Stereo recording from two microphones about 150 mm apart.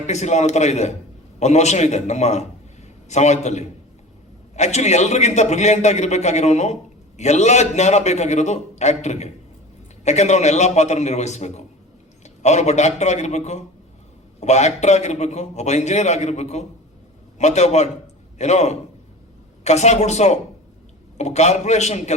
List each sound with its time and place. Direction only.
0.1 s a man's voice: 50° left (ahead or behind)